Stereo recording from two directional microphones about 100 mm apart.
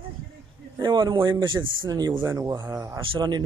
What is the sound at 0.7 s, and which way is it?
Speech, 40° right (ahead or behind).